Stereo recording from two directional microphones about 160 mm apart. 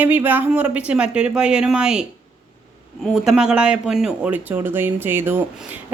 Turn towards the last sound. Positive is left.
turn(degrees=-15)  # may be behind; listen again after turning